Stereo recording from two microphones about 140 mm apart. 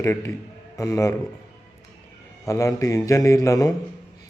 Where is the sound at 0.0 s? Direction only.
20° left (ahead or behind).